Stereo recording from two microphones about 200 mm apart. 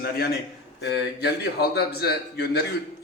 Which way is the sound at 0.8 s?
55° left (ahead or behind).